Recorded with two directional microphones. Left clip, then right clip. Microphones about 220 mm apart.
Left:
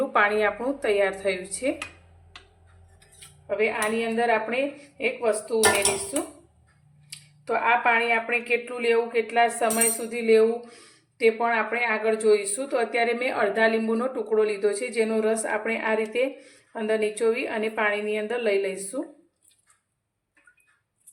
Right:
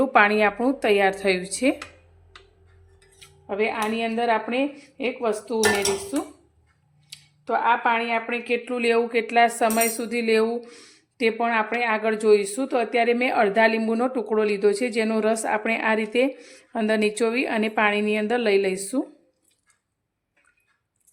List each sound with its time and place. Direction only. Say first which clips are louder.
0.0 s a woman's voice: right 4 dB; 45° right (ahead or behind)
3.4 s a woman's voice: even; 40° right (ahead or behind)
7.1 s a woman's voice: right 2 dB; 25° right (ahead or behind); by 19.0 s 50° right (ahead or behind)